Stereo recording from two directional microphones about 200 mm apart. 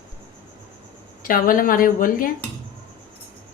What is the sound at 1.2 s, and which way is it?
A woman's voice, 45° left (ahead or behind).